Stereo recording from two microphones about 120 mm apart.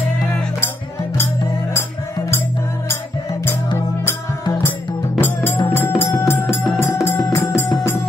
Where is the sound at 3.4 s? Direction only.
20° left (ahead or behind).